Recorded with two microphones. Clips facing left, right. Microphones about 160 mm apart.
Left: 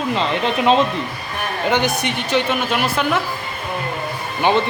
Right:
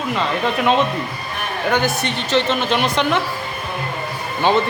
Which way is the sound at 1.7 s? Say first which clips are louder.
Even; 20° left (ahead or behind).